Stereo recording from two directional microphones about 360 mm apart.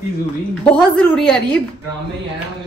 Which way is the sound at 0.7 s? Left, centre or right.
Centre.